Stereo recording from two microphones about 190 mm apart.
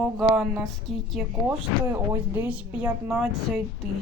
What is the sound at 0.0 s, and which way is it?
Speech, centre (ahead or behind).